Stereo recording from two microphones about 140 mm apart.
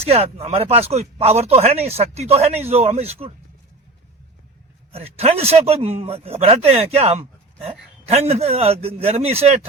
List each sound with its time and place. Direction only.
0.0 s speech: 45° right (ahead or behind)
4.9 s speech: 45° right (ahead or behind)